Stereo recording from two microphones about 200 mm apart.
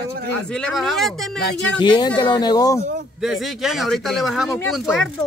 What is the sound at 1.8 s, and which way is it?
Speech, 20° left (ahead or behind).